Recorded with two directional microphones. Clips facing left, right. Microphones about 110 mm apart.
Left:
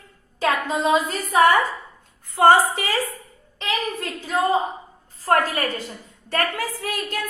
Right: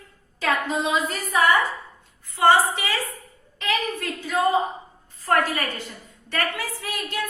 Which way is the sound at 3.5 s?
30° left (ahead or behind).